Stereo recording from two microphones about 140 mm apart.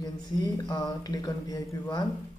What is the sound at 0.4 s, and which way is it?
Speech, 30° left (ahead or behind).